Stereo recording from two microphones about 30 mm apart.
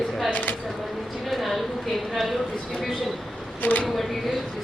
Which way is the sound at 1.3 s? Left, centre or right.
Centre.